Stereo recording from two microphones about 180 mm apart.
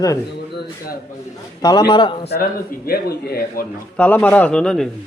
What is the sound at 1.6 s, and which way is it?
Speech, 20° left (ahead or behind).